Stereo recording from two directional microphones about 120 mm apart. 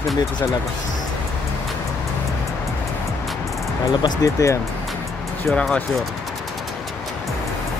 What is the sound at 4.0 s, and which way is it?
Speech, 30° left (ahead or behind).